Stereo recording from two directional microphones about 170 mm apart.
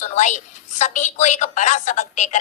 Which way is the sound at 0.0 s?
45° left (ahead or behind).